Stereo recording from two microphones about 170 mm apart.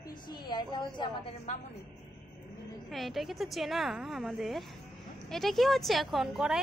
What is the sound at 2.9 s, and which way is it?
A woman's voice, centre (ahead or behind).